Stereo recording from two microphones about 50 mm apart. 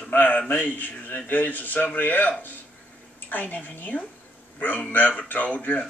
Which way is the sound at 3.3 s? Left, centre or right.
Left.